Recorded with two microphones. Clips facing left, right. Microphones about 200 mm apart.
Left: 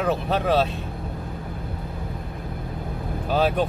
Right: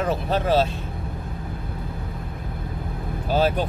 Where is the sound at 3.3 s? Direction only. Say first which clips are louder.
Even; centre (ahead or behind).